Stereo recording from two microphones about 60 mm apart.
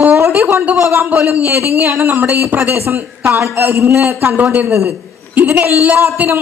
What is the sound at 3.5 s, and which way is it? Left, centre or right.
Speech, right.